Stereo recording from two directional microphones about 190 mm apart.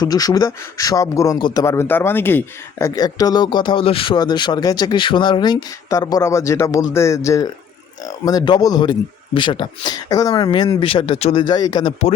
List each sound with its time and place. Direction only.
0.0 s speech: 20° left (ahead or behind)